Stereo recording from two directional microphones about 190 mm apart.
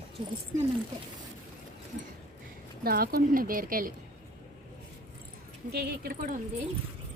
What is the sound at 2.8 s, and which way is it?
Speech, 50° right (ahead or behind).